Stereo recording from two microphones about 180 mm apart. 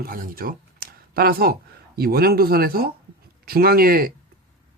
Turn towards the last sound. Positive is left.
turn(degrees=-55)  # may be behind; listen again after turning